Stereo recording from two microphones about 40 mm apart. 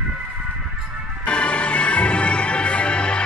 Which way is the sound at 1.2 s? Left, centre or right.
Left.